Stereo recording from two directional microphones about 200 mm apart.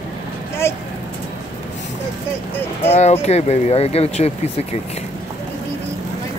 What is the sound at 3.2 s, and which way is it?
Speech, 35° left (ahead or behind).